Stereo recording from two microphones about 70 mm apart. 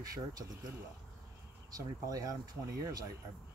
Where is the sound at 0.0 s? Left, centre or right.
Right.